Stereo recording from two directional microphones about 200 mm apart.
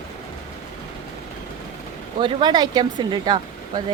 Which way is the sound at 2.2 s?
25° right (ahead or behind).